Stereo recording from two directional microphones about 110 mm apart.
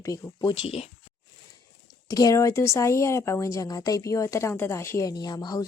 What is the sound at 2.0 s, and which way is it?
Speech, 30° left (ahead or behind).